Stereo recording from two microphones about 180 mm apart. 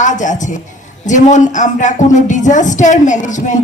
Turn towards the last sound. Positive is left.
turn(degrees=45)  # may be behind; listen again after turning